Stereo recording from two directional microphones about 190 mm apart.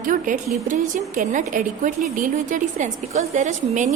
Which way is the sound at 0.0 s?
45° right (ahead or behind).